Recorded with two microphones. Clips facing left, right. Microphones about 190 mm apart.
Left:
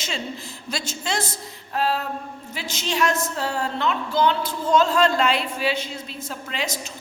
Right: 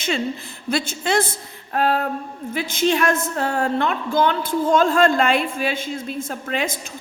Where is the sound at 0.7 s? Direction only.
55° right (ahead or behind).